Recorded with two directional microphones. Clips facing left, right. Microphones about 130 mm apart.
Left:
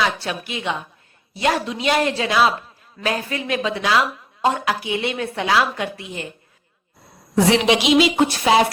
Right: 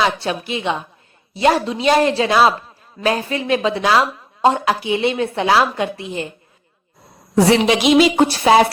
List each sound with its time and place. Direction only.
0.0 s speech: 30° right (ahead or behind)
7.3 s speech: 35° right (ahead or behind)
7.8 s speech: 45° right (ahead or behind)